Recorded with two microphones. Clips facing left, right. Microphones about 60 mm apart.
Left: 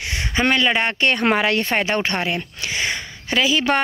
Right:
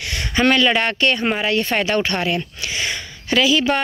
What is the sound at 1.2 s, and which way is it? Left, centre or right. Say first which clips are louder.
Speech: left 2 dB; left.